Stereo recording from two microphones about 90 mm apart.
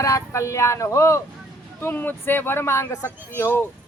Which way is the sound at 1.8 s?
20° left (ahead or behind).